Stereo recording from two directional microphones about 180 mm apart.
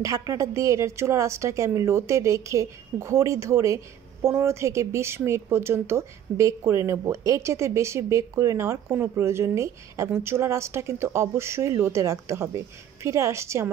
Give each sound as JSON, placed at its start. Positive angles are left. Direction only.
{"t": 0.0, "sound": "a woman's voice", "side_deg": -20}